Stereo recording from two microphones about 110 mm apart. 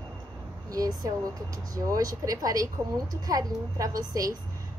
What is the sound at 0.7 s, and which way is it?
Speech, 30° right (ahead or behind).